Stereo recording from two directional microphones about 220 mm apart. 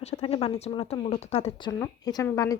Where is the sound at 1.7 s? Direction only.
15° left (ahead or behind).